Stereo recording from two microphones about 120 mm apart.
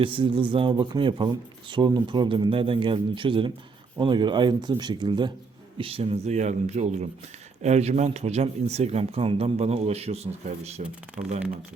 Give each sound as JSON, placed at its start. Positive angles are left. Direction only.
{"t": 0.0, "sound": "speech", "side_deg": -45}
{"t": 5.7, "sound": "speech", "side_deg": -50}